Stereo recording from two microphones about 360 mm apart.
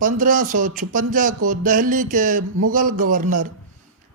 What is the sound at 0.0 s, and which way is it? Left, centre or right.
Speech, right.